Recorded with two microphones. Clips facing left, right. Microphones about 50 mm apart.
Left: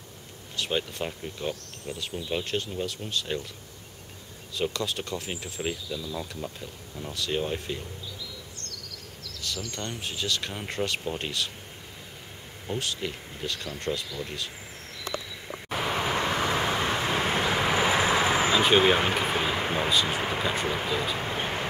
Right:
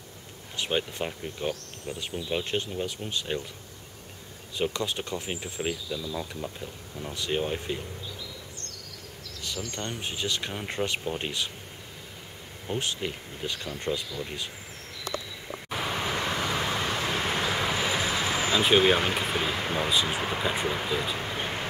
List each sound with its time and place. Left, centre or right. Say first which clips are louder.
0.6 s speech: right 1 dB; centre
4.6 s speech: even; centre
6.6 s speech: right 1 dB; centre
9.4 s speech: even; centre
10.5 s speech: even; centre
12.7 s speech: right 1 dB; right
13.0 s speech: even; centre
15.7 s vehicle: left 3 dB; centre
18.5 s speech: right 1 dB; centre
19.9 s speech: left 1 dB; centre
20.2 s speech: left 1 dB; centre
21.2 s vehicle: left 2 dB; centre